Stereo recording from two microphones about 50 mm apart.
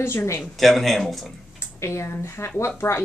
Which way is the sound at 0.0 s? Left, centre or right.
Left.